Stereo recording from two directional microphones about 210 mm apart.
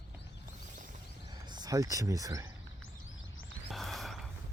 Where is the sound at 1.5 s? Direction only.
20° right (ahead or behind).